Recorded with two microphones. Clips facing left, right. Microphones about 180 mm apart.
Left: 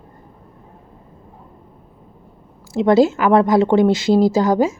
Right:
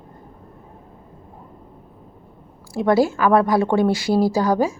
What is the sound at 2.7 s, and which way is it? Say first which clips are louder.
Speech: left 4 dB; 20° left (ahead or behind).